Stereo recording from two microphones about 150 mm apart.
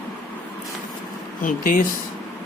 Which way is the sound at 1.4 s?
65° left (ahead or behind).